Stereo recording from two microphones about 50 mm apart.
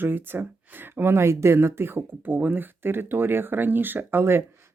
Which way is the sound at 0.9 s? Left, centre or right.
Right.